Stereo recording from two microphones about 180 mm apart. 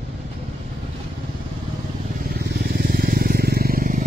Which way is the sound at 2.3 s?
65° right (ahead or behind).